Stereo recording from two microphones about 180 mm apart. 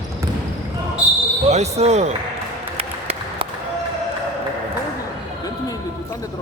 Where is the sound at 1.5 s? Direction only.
40° right (ahead or behind).